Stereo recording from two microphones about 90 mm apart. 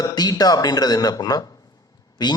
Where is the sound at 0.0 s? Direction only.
45° left (ahead or behind).